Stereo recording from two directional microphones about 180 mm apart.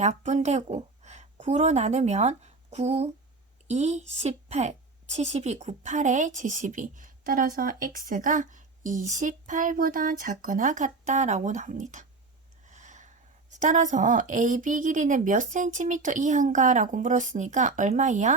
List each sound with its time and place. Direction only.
0.0 s a woman's voice: 40° right (ahead or behind)
12.6 s snort: 40° right (ahead or behind)
13.5 s a woman's voice: 45° right (ahead or behind)